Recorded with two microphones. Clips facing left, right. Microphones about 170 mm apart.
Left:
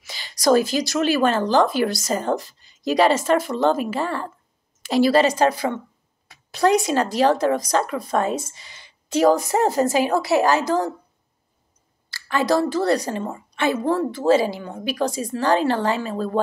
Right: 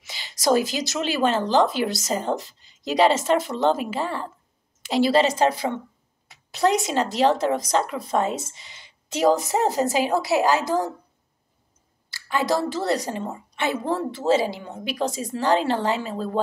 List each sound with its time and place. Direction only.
0.0 s a woman's voice: 20° right (ahead or behind)
12.1 s speech: 15° right (ahead or behind)